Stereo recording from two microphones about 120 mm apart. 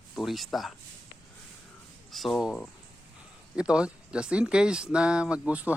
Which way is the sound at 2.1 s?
Centre (ahead or behind).